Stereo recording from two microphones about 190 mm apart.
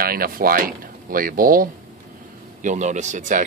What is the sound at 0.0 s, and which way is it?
Speech, 50° right (ahead or behind).